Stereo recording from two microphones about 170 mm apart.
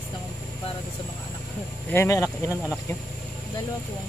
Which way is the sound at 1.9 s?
15° left (ahead or behind).